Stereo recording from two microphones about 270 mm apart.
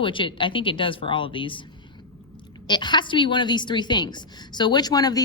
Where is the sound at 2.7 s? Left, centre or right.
Centre.